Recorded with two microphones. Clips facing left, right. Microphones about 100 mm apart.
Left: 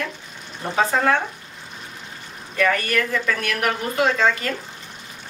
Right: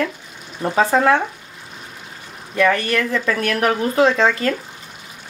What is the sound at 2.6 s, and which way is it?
A woman's voice, 30° right (ahead or behind).